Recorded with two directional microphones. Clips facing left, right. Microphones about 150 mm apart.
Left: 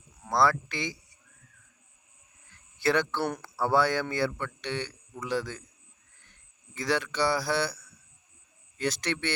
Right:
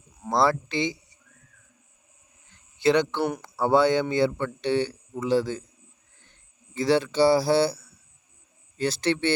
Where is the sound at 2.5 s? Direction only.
20° right (ahead or behind).